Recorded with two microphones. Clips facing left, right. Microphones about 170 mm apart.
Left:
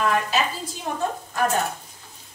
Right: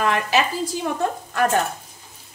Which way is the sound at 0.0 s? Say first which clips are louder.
Right 2 dB; 90° right.